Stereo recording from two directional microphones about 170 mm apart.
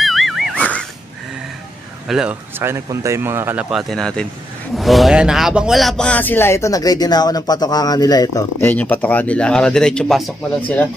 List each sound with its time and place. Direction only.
0.0 s a sound: centre (ahead or behind)
2.0 s speech: 5° right (ahead or behind)
3.7 s speech: 5° left (ahead or behind); by 8.5 s 20° left (ahead or behind)
8.5 s speech: 10° left (ahead or behind)